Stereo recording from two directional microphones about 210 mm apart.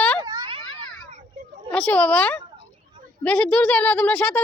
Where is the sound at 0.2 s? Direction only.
20° right (ahead or behind).